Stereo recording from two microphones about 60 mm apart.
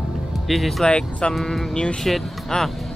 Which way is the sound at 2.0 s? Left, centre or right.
Centre.